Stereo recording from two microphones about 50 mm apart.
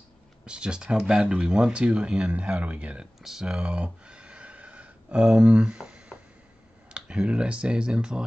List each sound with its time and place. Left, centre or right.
0.5 s speech: centre
3.2 s speech: centre
3.4 s a sound: centre
6.9 s speech: centre